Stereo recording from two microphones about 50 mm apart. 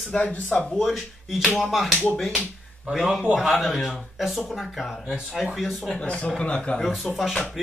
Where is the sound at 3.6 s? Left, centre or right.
Centre.